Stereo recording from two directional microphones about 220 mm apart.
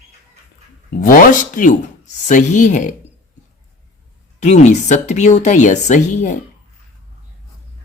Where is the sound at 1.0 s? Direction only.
40° left (ahead or behind).